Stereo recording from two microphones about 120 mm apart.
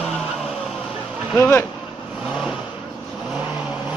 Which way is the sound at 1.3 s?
15° left (ahead or behind).